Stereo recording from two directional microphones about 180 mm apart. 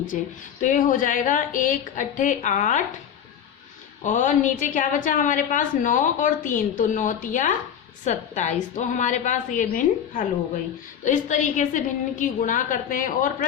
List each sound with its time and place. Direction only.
0.6 s a woman's voice: 50° left (ahead or behind)
4.0 s a woman's voice: 45° left (ahead or behind)